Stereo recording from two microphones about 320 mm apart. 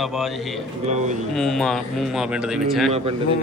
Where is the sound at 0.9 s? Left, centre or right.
Right.